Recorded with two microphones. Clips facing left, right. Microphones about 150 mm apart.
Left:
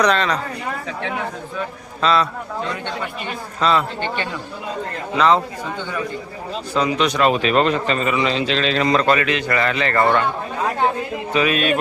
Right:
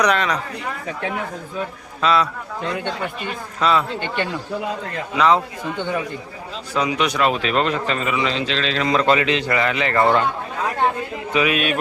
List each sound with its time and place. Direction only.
0.0 s speech: 10° right (ahead or behind)
2.0 s a man's voice: 10° right (ahead or behind)
3.6 s speech: 5° right (ahead or behind)
5.1 s speech: 10° right (ahead or behind)
6.7 s a man's voice: 10° right (ahead or behind)
9.0 s a man's voice: 20° right (ahead or behind)
9.6 s speech: 15° right (ahead or behind)
11.3 s speech: 10° right (ahead or behind)